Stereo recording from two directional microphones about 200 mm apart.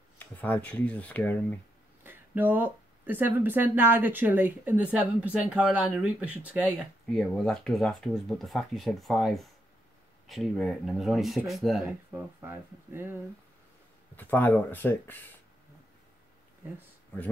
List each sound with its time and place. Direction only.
0.4 s speech: 10° left (ahead or behind)
2.0 s speech: 10° right (ahead or behind)
12.4 s speech: 10° right (ahead or behind)
14.1 s speech: 10° left (ahead or behind)